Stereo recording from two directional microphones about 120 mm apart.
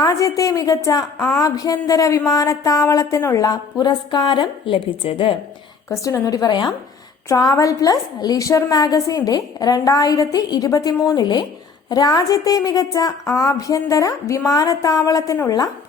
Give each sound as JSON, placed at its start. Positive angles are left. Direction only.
{"t": 0.0, "sound": "speech", "side_deg": 30}
{"t": 5.9, "sound": "a woman's voice", "side_deg": 30}